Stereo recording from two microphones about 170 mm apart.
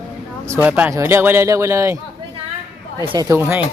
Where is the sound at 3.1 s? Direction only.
20° right (ahead or behind).